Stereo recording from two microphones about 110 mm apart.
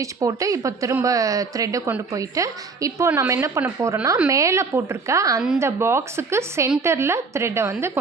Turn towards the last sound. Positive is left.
turn(degrees=-25)  # may be behind; listen again after turning